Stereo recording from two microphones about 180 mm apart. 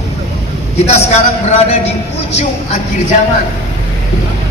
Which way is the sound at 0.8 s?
35° left (ahead or behind).